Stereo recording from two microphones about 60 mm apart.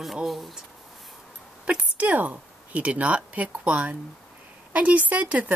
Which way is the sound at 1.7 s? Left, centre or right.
Right.